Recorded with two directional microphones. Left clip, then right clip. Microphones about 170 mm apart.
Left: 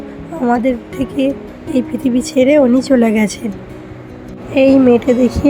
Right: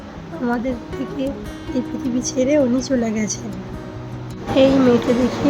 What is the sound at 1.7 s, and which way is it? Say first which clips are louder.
A woman's voice: left 8 dB; 30° left (ahead or behind).